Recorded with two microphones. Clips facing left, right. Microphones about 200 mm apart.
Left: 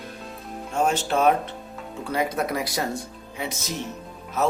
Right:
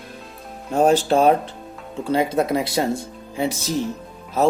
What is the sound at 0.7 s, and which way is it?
Speech, 35° right (ahead or behind).